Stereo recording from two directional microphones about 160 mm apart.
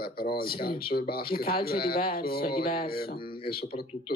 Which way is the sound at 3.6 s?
35° left (ahead or behind).